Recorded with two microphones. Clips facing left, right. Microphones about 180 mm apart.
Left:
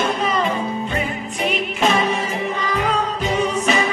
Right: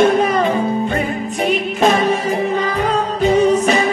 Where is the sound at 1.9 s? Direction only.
40° right (ahead or behind).